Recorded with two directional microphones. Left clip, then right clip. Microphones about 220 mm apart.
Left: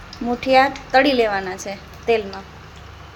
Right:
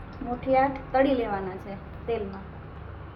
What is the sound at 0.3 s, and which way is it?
A woman's voice, 50° left (ahead or behind).